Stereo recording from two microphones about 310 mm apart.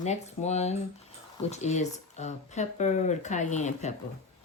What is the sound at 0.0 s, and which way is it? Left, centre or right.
Speech, left.